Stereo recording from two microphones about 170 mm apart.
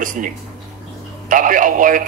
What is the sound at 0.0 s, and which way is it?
Speech, 55° right (ahead or behind).